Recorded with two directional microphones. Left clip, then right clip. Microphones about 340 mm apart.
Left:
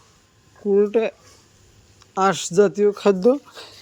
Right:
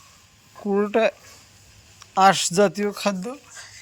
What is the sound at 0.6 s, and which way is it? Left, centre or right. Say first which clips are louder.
A man's voice: left 2 dB; centre.